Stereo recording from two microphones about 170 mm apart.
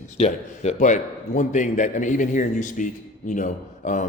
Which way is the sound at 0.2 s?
40° left (ahead or behind).